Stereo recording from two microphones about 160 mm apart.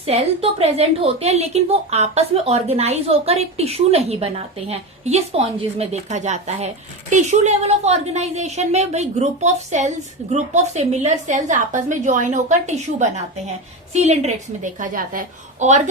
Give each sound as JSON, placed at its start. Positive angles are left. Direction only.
{"t": 0.6, "sound": "a woman's voice", "side_deg": -40}